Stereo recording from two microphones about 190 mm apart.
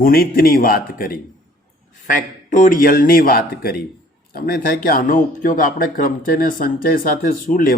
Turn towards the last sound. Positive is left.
turn(degrees=45)  # may be behind; listen again after turning